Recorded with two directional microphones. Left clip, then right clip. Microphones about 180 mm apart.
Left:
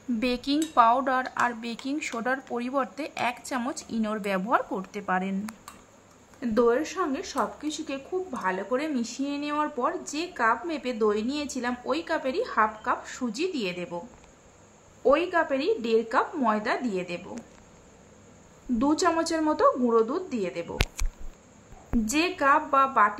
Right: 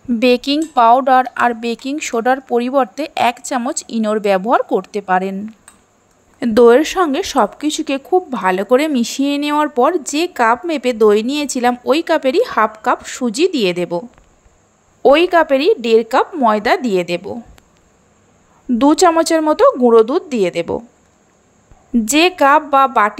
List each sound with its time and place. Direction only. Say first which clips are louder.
0.2 s speech: right 14 dB; 40° right (ahead or behind)
6.4 s speech: right 14 dB; 50° right (ahead or behind)
15.0 s speech: right 13 dB; 45° right (ahead or behind)
18.8 s speech: right 13 dB; 45° right (ahead or behind)
22.0 s speech: right 13 dB; 45° right (ahead or behind)